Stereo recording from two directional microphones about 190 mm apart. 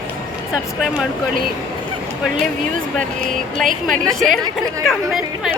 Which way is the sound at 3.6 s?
45° right (ahead or behind).